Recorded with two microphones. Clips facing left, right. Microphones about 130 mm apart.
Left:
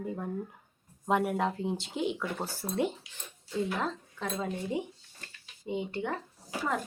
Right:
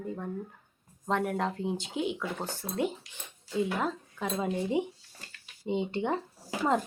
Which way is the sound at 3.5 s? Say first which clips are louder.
Right 2 dB; 10° right (ahead or behind).